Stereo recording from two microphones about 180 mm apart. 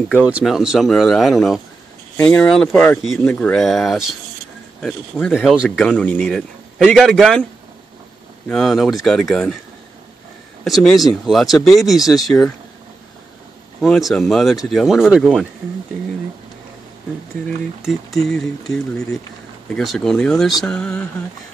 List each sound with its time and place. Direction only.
0.2 s speech: 5° right (ahead or behind)
8.5 s speech: centre (ahead or behind)
10.6 s speech: 5° left (ahead or behind)
13.7 s speech: centre (ahead or behind)
17.8 s speech: centre (ahead or behind)